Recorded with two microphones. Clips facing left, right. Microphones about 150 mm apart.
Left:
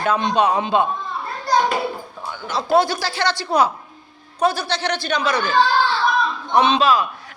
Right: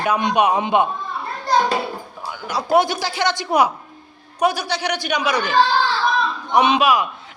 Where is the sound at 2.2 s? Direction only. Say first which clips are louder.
Even; 15° right (ahead or behind).